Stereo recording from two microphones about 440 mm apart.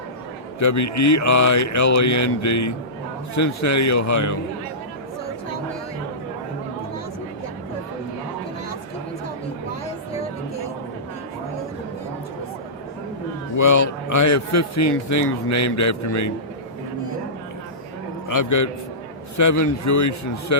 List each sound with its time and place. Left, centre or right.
0.6 s a man's voice: left
13.6 s a man's voice: left
18.3 s a man's voice: left